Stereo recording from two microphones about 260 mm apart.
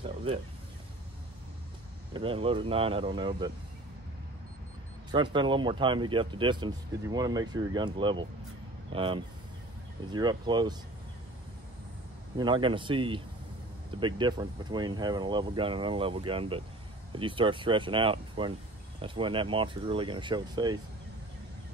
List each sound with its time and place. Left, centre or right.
2.1 s speech: right
5.1 s speech: centre
12.4 s speech: centre